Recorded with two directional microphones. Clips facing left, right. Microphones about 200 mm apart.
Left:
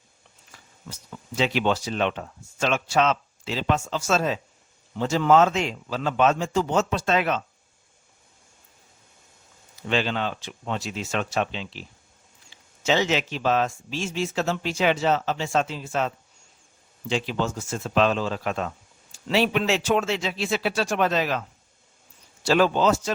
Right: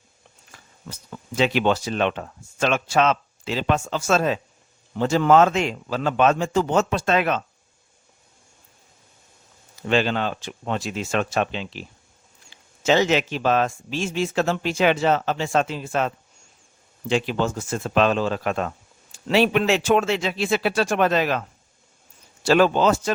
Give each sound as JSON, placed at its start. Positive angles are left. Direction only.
{"t": 1.4, "sound": "speech", "side_deg": -55}
{"t": 9.8, "sound": "speech", "side_deg": -50}
{"t": 12.8, "sound": "speech", "side_deg": -50}
{"t": 22.4, "sound": "speech", "side_deg": -60}